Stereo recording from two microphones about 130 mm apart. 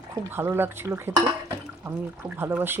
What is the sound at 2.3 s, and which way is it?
Speech, 20° right (ahead or behind).